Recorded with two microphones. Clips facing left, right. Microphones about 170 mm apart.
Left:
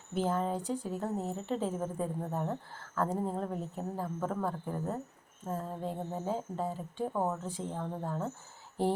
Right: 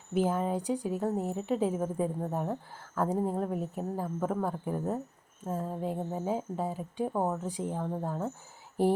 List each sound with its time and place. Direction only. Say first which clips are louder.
0.1 s a woman's voice: right 3 dB; 10° right (ahead or behind)